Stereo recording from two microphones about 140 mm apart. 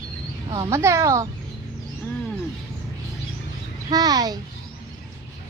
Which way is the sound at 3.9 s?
30° right (ahead or behind).